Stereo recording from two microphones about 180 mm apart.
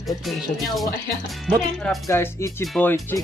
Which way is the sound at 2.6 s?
Centre (ahead or behind).